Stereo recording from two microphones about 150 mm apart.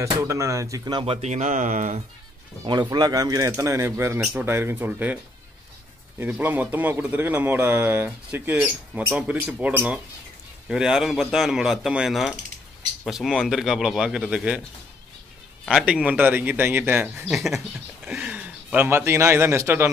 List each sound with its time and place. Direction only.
0.0 s speech: 20° right (ahead or behind); by 2.0 s 55° right (ahead or behind)
2.6 s a man's voice: 30° right (ahead or behind); by 14.6 s 5° right (ahead or behind)
15.7 s a man's voice: 5° right (ahead or behind)
17.3 s a man's voice: centre (ahead or behind); by 19.9 s 15° right (ahead or behind)